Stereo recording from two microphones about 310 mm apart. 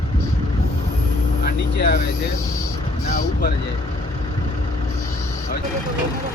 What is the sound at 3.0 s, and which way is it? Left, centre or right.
Speech, left.